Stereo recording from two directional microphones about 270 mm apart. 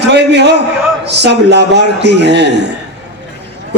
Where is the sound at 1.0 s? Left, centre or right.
Right.